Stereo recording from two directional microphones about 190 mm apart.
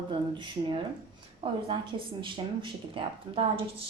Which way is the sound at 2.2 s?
25° right (ahead or behind).